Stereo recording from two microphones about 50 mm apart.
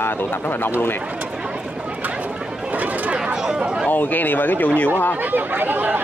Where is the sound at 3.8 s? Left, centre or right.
Left.